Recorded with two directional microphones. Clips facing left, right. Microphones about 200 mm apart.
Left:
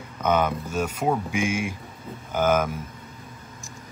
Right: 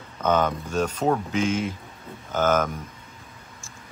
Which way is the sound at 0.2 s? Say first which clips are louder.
Even; 10° left (ahead or behind).